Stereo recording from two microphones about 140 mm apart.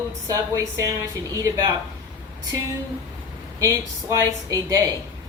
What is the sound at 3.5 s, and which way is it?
A woman's voice, 20° right (ahead or behind).